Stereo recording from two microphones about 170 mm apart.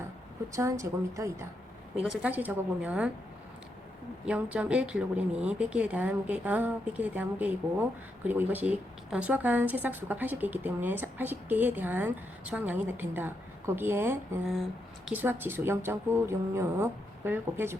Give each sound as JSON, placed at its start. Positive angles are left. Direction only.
{"t": 0.5, "sound": "a woman's voice", "side_deg": -20}
{"t": 2.0, "sound": "a woman's voice", "side_deg": -5}
{"t": 4.3, "sound": "a woman's voice", "side_deg": -10}